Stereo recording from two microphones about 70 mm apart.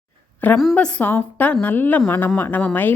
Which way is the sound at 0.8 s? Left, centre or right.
Centre.